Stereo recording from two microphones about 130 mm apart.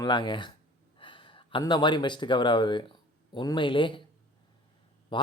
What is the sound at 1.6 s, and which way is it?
Speech, 35° left (ahead or behind).